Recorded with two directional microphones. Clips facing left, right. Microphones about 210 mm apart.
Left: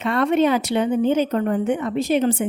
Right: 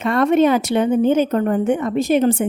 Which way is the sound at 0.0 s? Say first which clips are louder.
Right 3 dB; 45° right (ahead or behind).